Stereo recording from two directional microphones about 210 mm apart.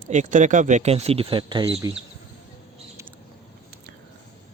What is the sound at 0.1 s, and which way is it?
Speech, 35° right (ahead or behind).